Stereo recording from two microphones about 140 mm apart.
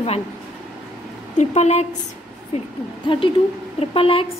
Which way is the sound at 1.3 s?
55° left (ahead or behind).